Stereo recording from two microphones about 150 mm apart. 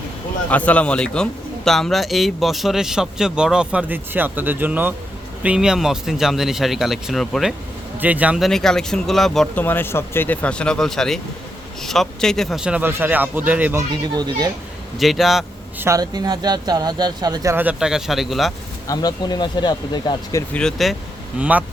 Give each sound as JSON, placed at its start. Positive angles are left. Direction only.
{"t": 0.5, "sound": "a man's voice", "side_deg": 10}
{"t": 7.9, "sound": "a man's voice", "side_deg": -10}
{"t": 8.4, "sound": "a man's voice", "side_deg": 5}
{"t": 9.6, "sound": "a man's voice", "side_deg": 15}
{"t": 14.2, "sound": "speech", "side_deg": -25}
{"t": 14.9, "sound": "a man's voice", "side_deg": 0}
{"t": 15.8, "sound": "speech", "side_deg": -20}
{"t": 18.9, "sound": "speech", "side_deg": 25}
{"t": 20.5, "sound": "a man's voice", "side_deg": 5}
{"t": 21.3, "sound": "a man's voice", "side_deg": -10}